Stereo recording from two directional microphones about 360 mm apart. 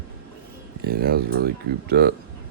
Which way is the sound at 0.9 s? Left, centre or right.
Right.